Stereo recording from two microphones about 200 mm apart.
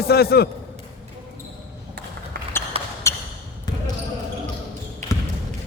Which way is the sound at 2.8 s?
30° right (ahead or behind).